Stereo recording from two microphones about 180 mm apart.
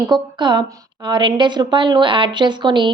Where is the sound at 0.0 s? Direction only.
25° right (ahead or behind).